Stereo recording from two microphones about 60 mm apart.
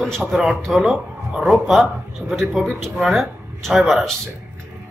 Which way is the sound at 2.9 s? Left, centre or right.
Centre.